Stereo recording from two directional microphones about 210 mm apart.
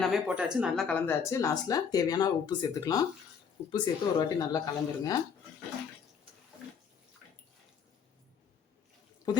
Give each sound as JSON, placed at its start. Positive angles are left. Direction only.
{"t": 0.0, "sound": "speech", "side_deg": 0}